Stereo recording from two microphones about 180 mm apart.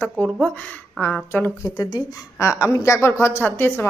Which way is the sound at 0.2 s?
5° left (ahead or behind).